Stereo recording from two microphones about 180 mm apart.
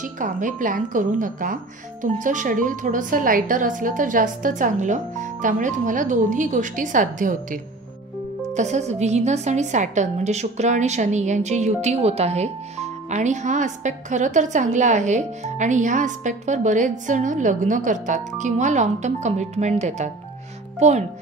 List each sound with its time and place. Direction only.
0.0 s a woman's voice: 45° right (ahead or behind)